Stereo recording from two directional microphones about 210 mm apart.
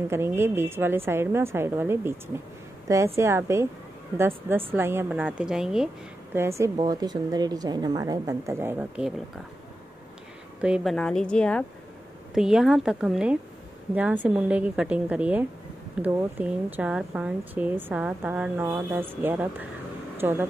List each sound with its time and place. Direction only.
0.1 s a woman's voice: 10° right (ahead or behind)
3.2 s a woman's voice: 10° right (ahead or behind)
4.7 s a woman's voice: 10° right (ahead or behind)
10.6 s a woman's voice: centre (ahead or behind)